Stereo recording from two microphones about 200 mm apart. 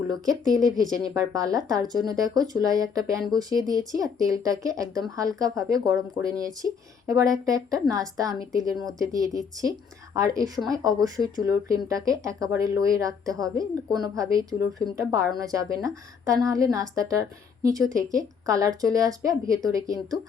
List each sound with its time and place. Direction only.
0.1 s speech: 20° right (ahead or behind)